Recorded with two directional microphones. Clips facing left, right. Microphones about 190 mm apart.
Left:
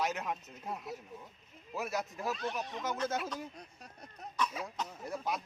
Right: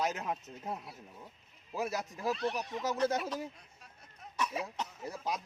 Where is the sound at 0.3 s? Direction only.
30° right (ahead or behind).